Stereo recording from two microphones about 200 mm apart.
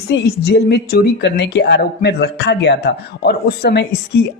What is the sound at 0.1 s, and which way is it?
A woman's voice, 55° left (ahead or behind).